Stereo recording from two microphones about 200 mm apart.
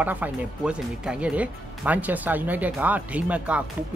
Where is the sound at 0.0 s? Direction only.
10° right (ahead or behind).